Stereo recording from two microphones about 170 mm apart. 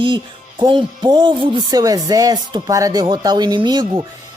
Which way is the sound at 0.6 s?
25° right (ahead or behind).